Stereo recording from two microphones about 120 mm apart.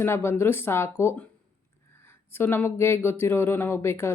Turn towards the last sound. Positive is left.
turn(degrees=20)  # may be behind; listen again after turning